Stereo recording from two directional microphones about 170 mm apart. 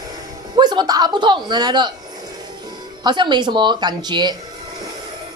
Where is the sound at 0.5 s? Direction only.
25° right (ahead or behind).